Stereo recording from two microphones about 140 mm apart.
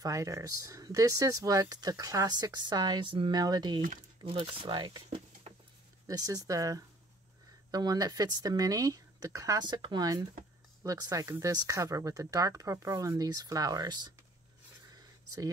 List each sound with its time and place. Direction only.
0.0 s speech: 20° right (ahead or behind)
4.2 s speech: 40° right (ahead or behind)